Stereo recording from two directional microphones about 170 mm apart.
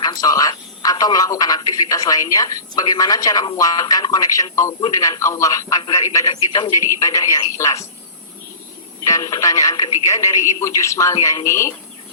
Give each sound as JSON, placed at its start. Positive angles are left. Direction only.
{"t": 0.0, "sound": "speech", "side_deg": 20}
{"t": 9.0, "sound": "speech", "side_deg": 20}